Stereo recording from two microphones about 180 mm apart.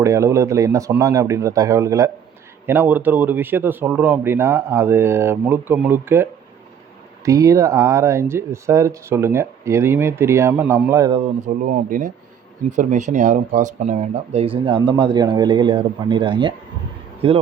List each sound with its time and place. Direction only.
0.0 s speech: 15° right (ahead or behind)
7.3 s speech: 20° right (ahead or behind)
11.1 s speech: 40° right (ahead or behind)